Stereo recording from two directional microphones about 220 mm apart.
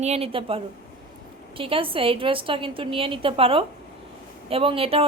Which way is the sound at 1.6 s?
25° right (ahead or behind).